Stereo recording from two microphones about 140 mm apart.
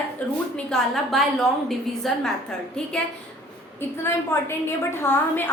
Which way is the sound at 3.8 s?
15° left (ahead or behind).